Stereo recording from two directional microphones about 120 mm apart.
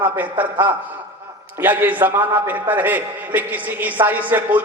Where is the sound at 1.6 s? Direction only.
15° right (ahead or behind).